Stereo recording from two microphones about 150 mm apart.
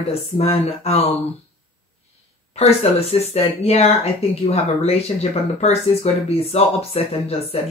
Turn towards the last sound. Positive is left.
turn(degrees=40)  # may be behind; listen again after turning